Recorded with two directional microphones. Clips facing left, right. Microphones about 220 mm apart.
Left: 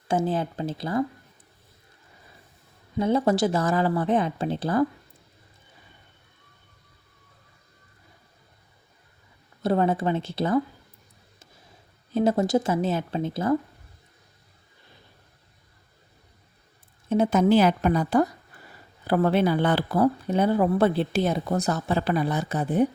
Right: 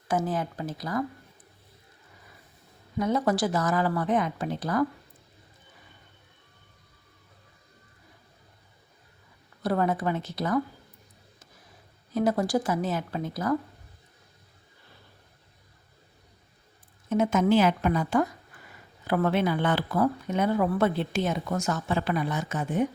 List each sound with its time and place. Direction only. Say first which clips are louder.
0.1 s speech: left 3 dB; 30° left (ahead or behind)
3.0 s speech: left 3 dB; 30° left (ahead or behind)
9.6 s speech: left 3 dB; 25° left (ahead or behind)
12.1 s speech: left 3 dB; 25° left (ahead or behind)
17.1 s speech: left 3 dB; 35° left (ahead or behind)